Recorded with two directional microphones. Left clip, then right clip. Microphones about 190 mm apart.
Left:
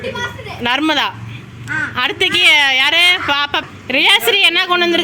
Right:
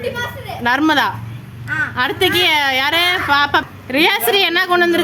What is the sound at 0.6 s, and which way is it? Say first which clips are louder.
A woman's voice: right 1 dB; centre (ahead or behind).